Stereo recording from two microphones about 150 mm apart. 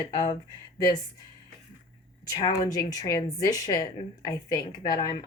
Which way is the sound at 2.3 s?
25° left (ahead or behind).